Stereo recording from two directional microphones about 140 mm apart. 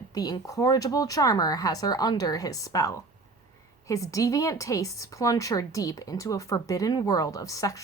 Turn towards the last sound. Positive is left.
turn(degrees=25)  # may be behind; listen again after turning